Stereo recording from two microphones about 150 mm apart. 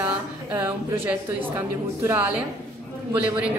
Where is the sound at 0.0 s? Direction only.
10° right (ahead or behind).